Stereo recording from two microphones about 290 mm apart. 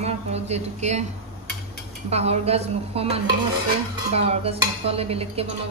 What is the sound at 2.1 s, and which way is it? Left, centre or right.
Speech, right.